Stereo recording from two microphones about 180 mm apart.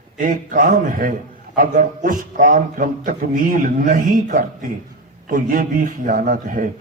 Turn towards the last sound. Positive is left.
turn(degrees=-50)  # may be behind; listen again after turning